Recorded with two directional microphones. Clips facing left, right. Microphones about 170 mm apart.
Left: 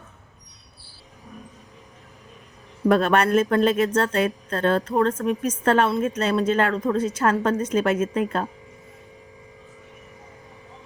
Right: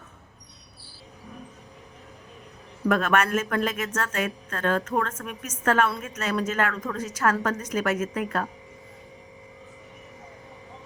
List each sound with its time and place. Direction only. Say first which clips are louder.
2.8 s a woman's voice: left 4 dB; 30° left (ahead or behind)